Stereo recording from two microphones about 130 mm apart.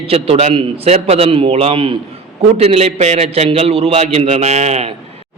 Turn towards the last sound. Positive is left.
turn(degrees=-55)  # may be behind; listen again after turning